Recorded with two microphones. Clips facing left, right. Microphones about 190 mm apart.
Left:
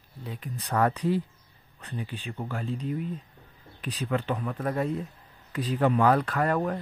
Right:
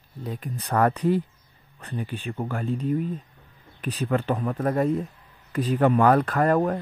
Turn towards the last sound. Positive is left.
turn(degrees=-45)  # may be behind; listen again after turning